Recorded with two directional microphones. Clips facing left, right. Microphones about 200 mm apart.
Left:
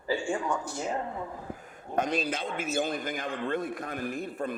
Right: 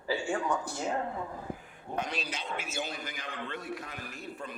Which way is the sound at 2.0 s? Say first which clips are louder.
Left 7 dB; 50° left (ahead or behind).